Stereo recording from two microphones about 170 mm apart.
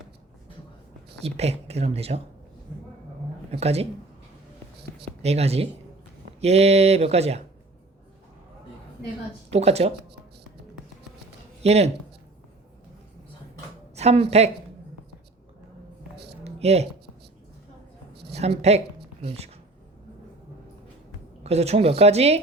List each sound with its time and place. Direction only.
1.2 s speech: 40° right (ahead or behind)
3.5 s speech: 40° right (ahead or behind)
5.0 s speech: 40° right (ahead or behind)
9.5 s speech: 40° right (ahead or behind)
11.6 s speech: 40° right (ahead or behind)
13.9 s speech: 40° right (ahead or behind)
16.4 s a sound: 40° right (ahead or behind)
18.3 s speech: 40° right (ahead or behind)
21.4 s speech: 40° right (ahead or behind)